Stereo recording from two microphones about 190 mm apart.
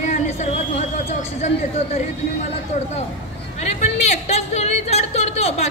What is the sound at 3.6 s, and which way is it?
Speech, 35° left (ahead or behind).